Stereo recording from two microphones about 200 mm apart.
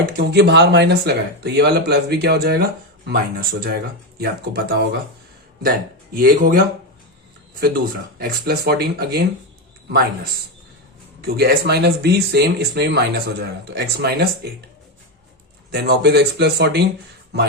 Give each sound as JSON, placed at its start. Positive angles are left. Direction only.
{"t": 0.0, "sound": "speech", "side_deg": -50}
{"t": 6.1, "sound": "speech", "side_deg": -45}
{"t": 8.2, "sound": "speech", "side_deg": -50}
{"t": 11.2, "sound": "speech", "side_deg": -50}
{"t": 15.7, "sound": "speech", "side_deg": -55}